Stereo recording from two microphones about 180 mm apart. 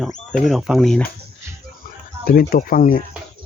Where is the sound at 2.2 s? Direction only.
55° left (ahead or behind).